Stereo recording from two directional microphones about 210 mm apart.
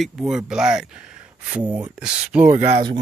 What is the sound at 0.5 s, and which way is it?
Speech, 5° right (ahead or behind).